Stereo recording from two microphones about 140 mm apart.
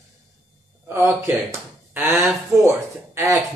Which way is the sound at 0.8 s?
20° right (ahead or behind).